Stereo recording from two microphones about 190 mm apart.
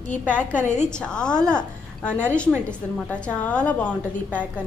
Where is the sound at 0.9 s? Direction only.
5° left (ahead or behind).